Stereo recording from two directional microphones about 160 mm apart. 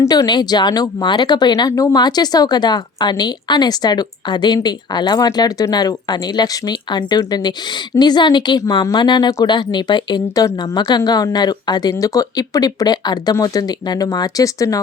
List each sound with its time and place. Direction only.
0.0 s speech: 25° left (ahead or behind)